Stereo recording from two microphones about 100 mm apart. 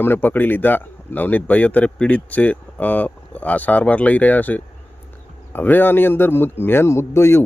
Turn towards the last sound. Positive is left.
turn(degrees=25)  # may be behind; listen again after turning